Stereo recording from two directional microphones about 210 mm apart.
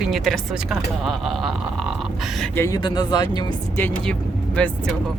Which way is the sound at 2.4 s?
10° left (ahead or behind).